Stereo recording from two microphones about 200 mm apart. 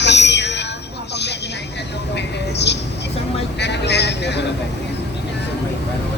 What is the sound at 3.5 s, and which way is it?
Speech, 60° left (ahead or behind).